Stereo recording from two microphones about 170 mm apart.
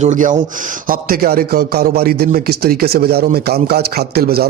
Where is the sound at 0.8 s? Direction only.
60° right (ahead or behind).